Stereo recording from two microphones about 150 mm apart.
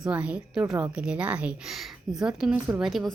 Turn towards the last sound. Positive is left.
turn(degrees=0)  # may be behind; listen again after turning